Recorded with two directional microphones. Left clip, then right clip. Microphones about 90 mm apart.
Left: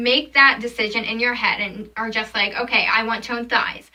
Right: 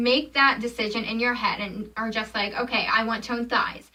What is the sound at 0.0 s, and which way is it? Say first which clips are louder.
A woman's voice: left 6 dB; 20° right (ahead or behind).